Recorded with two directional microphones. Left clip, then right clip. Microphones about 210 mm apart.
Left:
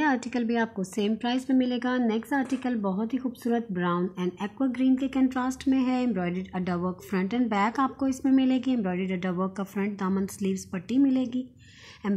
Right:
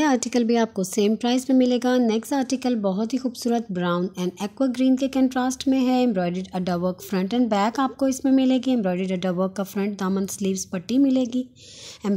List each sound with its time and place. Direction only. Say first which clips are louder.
0.0 s speech: right 5 dB; 45° right (ahead or behind)